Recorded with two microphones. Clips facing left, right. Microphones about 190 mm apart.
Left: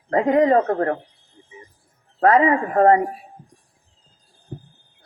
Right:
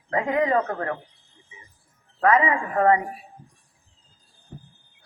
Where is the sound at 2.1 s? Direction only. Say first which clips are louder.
Left 4 dB; 35° left (ahead or behind).